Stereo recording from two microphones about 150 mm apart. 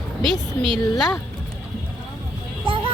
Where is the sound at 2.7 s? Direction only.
35° right (ahead or behind).